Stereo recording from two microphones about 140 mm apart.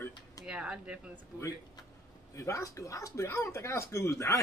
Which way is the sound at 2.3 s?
20° left (ahead or behind).